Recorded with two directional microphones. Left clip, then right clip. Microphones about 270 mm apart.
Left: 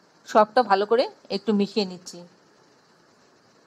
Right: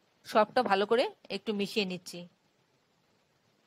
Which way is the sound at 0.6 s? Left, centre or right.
Right.